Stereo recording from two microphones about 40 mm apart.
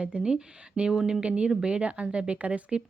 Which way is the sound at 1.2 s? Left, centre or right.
Right.